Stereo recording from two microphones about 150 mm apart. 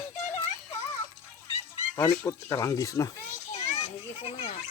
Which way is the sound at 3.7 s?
40° left (ahead or behind).